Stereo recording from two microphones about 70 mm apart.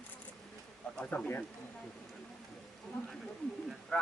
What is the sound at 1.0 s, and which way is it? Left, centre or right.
Speech, centre.